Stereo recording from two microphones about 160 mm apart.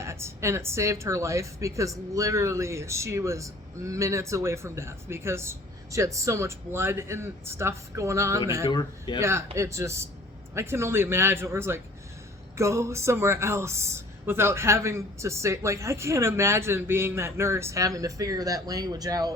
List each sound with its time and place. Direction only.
0.0 s speech: 15° right (ahead or behind)
8.6 s speech: 25° left (ahead or behind)
9.6 s speech: 20° right (ahead or behind)